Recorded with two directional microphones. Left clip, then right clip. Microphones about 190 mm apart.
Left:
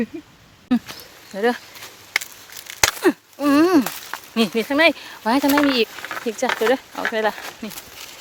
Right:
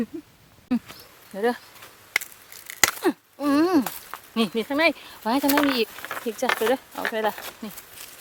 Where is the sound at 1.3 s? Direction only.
5° right (ahead or behind).